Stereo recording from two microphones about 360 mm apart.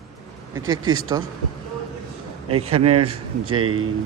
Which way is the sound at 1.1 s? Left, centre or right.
Centre.